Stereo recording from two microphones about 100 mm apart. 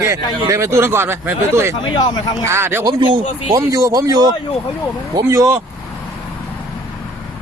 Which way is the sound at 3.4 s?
35° right (ahead or behind).